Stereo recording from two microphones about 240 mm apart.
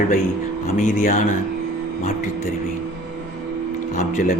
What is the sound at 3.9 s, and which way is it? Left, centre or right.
Speech, left.